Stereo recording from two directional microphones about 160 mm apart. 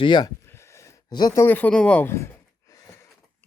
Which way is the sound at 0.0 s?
30° left (ahead or behind).